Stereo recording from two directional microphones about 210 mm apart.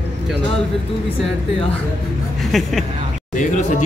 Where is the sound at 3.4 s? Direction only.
35° left (ahead or behind).